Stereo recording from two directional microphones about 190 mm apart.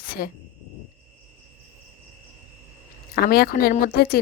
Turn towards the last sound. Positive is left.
turn(degrees=55)  # may be behind; listen again after turning